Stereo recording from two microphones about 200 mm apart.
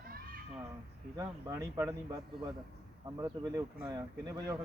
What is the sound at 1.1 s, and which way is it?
A man's voice, 15° right (ahead or behind).